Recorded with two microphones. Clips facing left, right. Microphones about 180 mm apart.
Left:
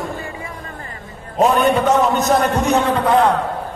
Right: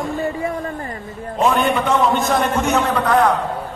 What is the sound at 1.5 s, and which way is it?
A man's voice, 40° left (ahead or behind).